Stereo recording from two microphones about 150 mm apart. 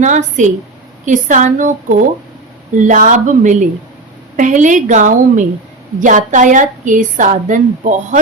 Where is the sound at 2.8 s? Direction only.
60° right (ahead or behind).